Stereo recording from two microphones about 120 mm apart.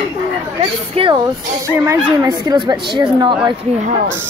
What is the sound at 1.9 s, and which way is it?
A woman's voice, 30° right (ahead or behind).